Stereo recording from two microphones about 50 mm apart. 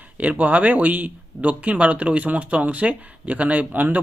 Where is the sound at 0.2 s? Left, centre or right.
Right.